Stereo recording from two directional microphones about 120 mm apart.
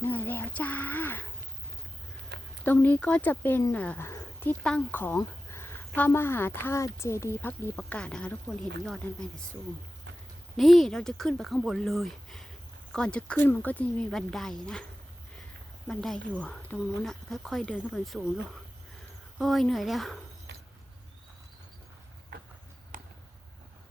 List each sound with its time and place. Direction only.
0.0 s a sound: 15° left (ahead or behind)
2.6 s speech: 15° left (ahead or behind)
10.6 s speech: centre (ahead or behind)
15.9 s speech: 5° left (ahead or behind)
19.4 s speech: centre (ahead or behind)
22.9 s a sound: 90° right